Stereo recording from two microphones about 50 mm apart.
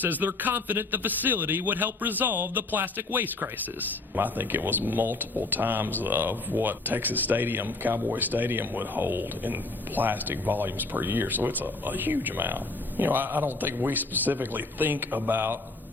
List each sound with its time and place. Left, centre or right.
0.0 s speech: right